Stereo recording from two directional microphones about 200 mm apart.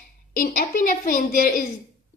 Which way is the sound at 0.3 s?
45° left (ahead or behind).